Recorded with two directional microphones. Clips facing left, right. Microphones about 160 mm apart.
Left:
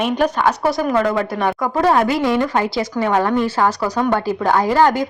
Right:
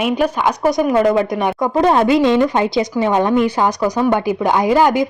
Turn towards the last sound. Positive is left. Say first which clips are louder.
# right 2 dB
turn(degrees=-10)  # may be behind; listen again after turning